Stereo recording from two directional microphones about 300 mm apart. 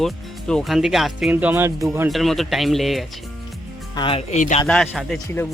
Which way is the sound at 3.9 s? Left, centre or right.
Centre.